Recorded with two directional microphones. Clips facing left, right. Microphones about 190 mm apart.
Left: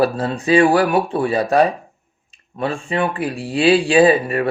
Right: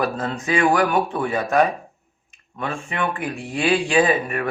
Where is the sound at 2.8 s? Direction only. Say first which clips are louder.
Left 4 dB; 30° left (ahead or behind).